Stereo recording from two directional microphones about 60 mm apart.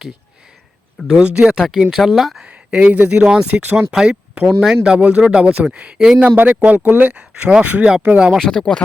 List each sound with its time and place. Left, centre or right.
1.0 s speech: centre
1.5 s speech: centre
2.4 s a sound: centre
2.9 s speech: right
3.5 s speech: right
3.9 s speech: centre
4.8 s speech: centre
6.6 s speech: right
8.4 s speech: centre